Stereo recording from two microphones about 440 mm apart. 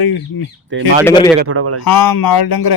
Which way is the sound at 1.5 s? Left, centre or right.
Right.